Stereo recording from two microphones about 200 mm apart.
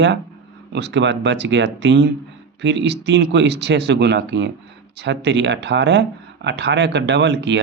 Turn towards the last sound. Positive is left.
turn(degrees=-60)  # may be behind; listen again after turning